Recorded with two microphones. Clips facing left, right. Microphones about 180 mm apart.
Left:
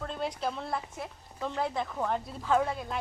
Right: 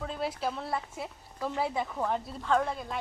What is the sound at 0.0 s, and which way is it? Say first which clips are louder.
Speech: even; 5° right (ahead or behind).